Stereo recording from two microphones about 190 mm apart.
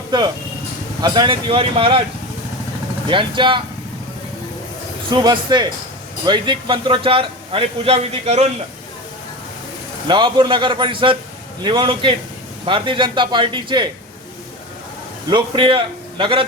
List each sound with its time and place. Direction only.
0.1 s a man's voice: 25° right (ahead or behind)
3.1 s a man's voice: 25° right (ahead or behind)
5.1 s a man's voice: 20° right (ahead or behind)
10.1 s a man's voice: 25° right (ahead or behind)
15.3 s a man's voice: 25° right (ahead or behind)